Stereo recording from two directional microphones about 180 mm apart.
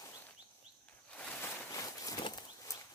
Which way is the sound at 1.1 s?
10° left (ahead or behind).